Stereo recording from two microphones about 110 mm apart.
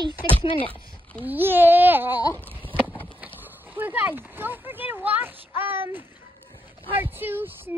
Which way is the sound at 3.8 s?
15° right (ahead or behind).